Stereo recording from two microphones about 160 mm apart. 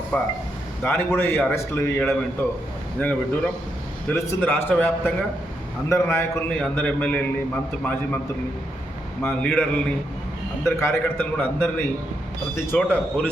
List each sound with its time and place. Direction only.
0.8 s a man's voice: 10° left (ahead or behind)
9.2 s a man's voice: 10° left (ahead or behind)